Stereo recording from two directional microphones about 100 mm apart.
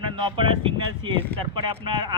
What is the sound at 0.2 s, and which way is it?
Speech, 55° right (ahead or behind).